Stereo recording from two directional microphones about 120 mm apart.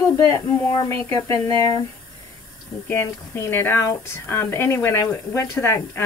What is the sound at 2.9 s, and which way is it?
Speech, 20° left (ahead or behind).